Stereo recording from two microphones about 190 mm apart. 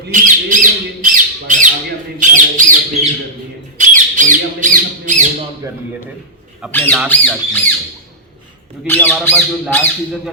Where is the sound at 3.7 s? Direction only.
45° right (ahead or behind).